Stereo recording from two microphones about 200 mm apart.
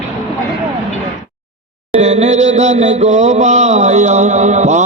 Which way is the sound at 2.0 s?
35° right (ahead or behind).